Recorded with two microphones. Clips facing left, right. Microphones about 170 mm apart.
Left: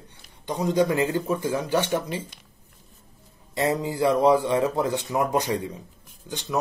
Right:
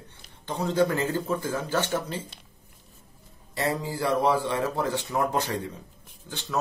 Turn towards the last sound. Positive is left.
turn(degrees=15)  # may be behind; listen again after turning